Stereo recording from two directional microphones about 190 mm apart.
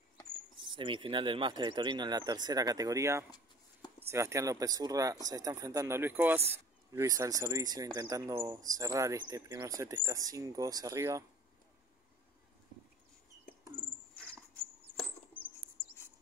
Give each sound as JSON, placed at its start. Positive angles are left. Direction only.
{"t": 0.6, "sound": "speech", "side_deg": -25}